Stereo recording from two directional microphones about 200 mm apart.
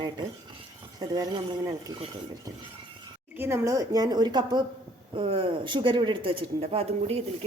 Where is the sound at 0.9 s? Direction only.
20° right (ahead or behind).